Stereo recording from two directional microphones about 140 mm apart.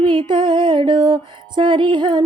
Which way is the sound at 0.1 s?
35° right (ahead or behind).